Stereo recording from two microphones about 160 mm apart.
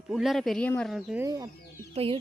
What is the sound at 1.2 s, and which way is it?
Speech, 20° right (ahead or behind).